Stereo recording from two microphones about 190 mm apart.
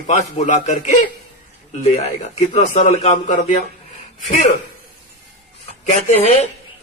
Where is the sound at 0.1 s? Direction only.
40° left (ahead or behind).